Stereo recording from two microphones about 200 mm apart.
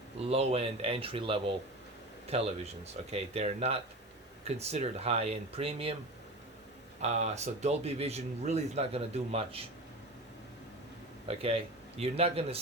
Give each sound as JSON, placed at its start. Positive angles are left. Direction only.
{"t": 0.3, "sound": "speech", "side_deg": -30}
{"t": 7.0, "sound": "speech", "side_deg": -35}
{"t": 11.3, "sound": "speech", "side_deg": -30}